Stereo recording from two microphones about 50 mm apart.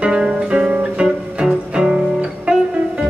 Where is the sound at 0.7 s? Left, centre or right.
Right.